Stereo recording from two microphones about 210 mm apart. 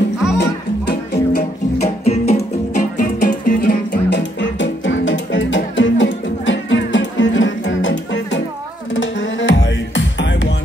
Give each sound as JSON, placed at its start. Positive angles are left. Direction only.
{"t": 0.4, "sound": "music", "side_deg": 50}
{"t": 1.8, "sound": "music", "side_deg": 30}
{"t": 4.1, "sound": "music", "side_deg": 60}